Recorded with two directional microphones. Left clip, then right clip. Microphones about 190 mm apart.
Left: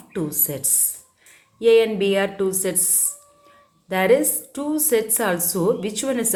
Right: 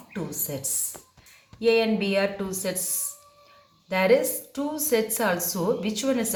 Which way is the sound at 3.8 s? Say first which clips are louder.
Left 3 dB; 60° left (ahead or behind).